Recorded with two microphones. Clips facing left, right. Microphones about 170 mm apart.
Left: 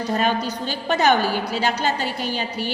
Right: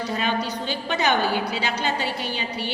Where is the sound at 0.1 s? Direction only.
45° left (ahead or behind).